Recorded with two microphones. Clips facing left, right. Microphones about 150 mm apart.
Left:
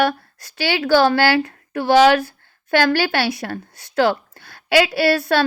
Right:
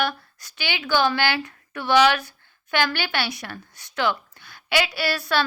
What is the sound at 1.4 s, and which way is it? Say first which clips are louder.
Speech: left 7 dB; 35° left (ahead or behind).